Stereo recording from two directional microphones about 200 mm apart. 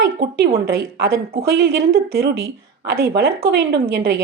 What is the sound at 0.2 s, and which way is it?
Speech, 55° right (ahead or behind).